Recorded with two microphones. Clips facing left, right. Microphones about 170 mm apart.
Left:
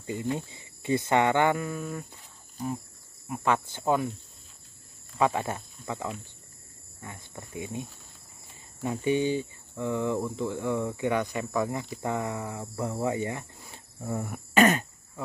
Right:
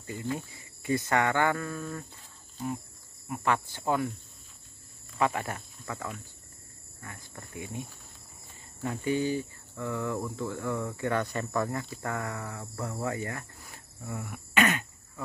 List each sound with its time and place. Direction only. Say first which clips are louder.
0.0 s speech: left 3 dB; 20° left (ahead or behind)
3.3 s speech: left 2 dB; 20° left (ahead or behind)
5.2 s speech: left 3 dB; 20° left (ahead or behind)
8.8 s speech: left 3 dB; 20° left (ahead or behind)
14.0 s throat clearing: left 6 dB; 40° left (ahead or behind)